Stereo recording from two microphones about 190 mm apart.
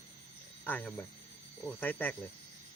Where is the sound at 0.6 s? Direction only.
10° left (ahead or behind).